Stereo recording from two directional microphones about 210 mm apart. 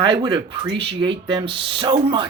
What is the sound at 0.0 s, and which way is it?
Speech, 20° right (ahead or behind).